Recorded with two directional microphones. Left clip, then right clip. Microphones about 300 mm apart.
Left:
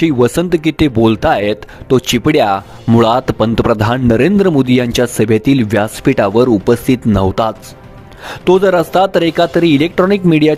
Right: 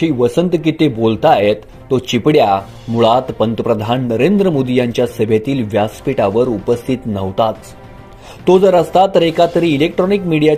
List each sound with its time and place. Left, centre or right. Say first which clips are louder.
0.0 s speech: left 2 dB; left